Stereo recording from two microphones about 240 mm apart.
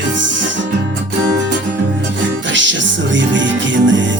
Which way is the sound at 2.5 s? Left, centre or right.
Right.